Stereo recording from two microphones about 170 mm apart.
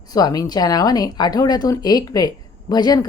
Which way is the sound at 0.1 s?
20° left (ahead or behind).